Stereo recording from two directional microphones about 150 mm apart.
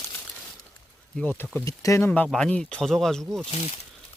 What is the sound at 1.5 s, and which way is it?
Speech, 20° left (ahead or behind).